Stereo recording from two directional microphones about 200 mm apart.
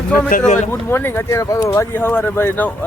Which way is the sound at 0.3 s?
40° left (ahead or behind).